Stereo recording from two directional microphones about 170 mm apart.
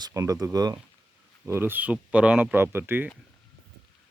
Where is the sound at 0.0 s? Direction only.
20° right (ahead or behind).